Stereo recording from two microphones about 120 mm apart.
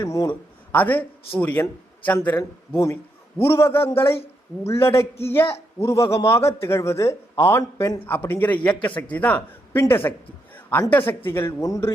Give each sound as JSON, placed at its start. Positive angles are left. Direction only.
{"t": 0.0, "sound": "a man's voice", "side_deg": 30}
{"t": 0.3, "sound": "speech", "side_deg": 15}
{"t": 2.4, "sound": "a man's voice", "side_deg": 25}